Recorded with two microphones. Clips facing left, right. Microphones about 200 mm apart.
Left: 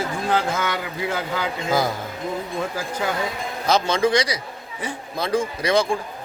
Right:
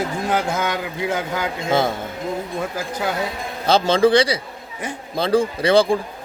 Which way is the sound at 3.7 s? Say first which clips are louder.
Right 4 dB; 30° right (ahead or behind).